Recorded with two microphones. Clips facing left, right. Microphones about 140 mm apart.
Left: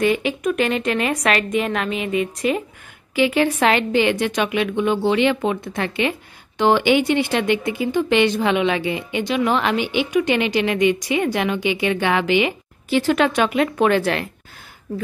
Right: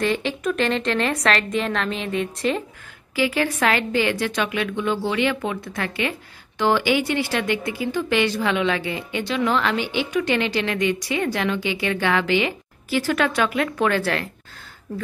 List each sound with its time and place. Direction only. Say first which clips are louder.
0.0 s speech: left 4 dB; 5° left (ahead or behind)
3.2 s a woman's voice: left 4 dB; 20° left (ahead or behind)